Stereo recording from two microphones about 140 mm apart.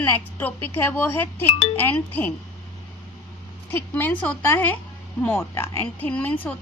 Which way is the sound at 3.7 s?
15° left (ahead or behind).